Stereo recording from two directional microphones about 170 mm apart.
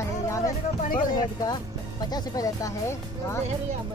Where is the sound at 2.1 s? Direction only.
20° left (ahead or behind).